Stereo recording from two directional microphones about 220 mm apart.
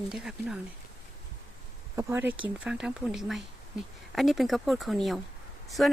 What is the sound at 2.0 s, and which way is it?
Speech, 10° right (ahead or behind).